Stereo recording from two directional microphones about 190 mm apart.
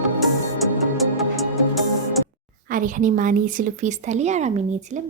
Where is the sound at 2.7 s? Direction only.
45° right (ahead or behind).